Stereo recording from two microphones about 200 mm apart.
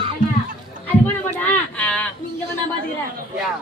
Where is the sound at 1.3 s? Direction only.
5° left (ahead or behind).